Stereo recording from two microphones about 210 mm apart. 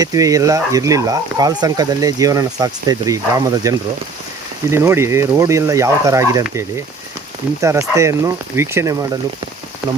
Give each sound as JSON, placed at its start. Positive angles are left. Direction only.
{"t": 0.0, "sound": "speech", "side_deg": -15}